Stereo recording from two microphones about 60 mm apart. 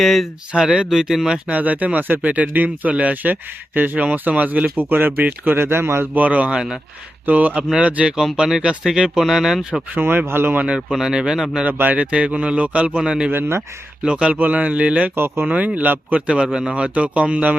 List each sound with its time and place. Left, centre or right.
0.0 s speech: centre
0.5 s a man's voice: centre
1.5 s speech: right
6.1 s speech: right
7.3 s a man's voice: right
8.2 s a man's voice: centre
9.9 s speech: right
10.8 s a man's voice: centre
11.6 s a man's voice: right
14.3 s speech: right
15.1 s speech: right
15.4 s speech: right
16.2 s speech: centre